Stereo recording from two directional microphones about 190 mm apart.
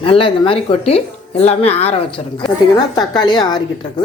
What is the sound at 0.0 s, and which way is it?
Speech, 30° left (ahead or behind).